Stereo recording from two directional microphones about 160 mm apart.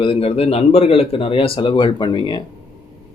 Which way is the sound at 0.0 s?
35° left (ahead or behind).